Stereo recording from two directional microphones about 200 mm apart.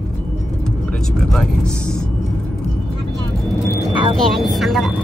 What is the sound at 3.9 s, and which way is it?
Speech, 25° right (ahead or behind).